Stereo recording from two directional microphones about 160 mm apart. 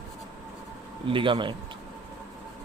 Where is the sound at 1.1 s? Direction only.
30° right (ahead or behind).